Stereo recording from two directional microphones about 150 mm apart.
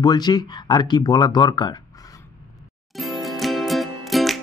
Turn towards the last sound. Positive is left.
turn(degrees=0)  # may be behind; listen again after turning